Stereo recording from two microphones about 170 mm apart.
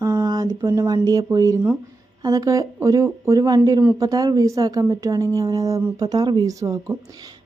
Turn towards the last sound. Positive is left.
turn(degrees=-20)  # may be behind; listen again after turning